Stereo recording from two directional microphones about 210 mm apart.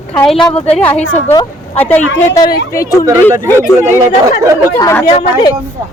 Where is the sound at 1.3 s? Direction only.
20° left (ahead or behind).